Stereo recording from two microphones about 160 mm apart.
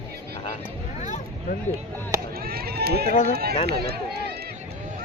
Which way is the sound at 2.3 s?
75° right (ahead or behind).